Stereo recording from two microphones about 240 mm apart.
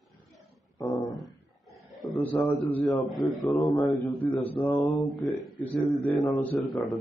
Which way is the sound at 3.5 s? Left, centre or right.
Centre.